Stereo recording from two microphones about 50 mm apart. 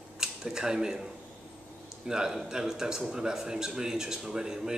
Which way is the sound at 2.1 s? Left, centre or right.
Centre.